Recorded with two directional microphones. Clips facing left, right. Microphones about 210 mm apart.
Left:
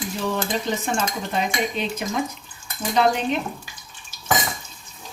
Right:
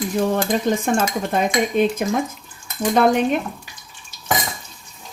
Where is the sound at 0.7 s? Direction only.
50° right (ahead or behind).